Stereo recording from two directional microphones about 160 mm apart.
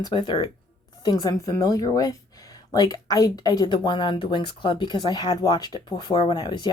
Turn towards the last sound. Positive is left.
turn(degrees=30)  # may be behind; listen again after turning